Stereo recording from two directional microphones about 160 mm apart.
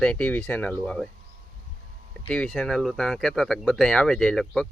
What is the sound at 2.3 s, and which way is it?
Speech, 5° left (ahead or behind).